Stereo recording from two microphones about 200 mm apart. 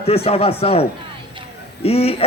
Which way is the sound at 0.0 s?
30° left (ahead or behind).